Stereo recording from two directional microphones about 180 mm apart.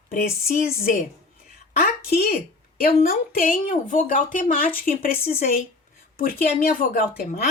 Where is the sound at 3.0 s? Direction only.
50° left (ahead or behind).